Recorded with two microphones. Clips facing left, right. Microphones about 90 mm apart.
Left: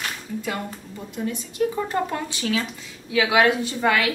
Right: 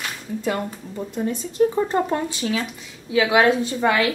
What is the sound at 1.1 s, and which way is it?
A woman's voice, 35° right (ahead or behind).